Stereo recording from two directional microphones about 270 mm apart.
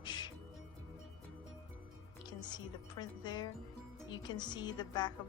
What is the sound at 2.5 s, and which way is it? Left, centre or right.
Speech, centre.